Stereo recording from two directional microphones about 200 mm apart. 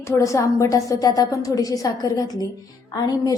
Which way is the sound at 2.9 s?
20° left (ahead or behind).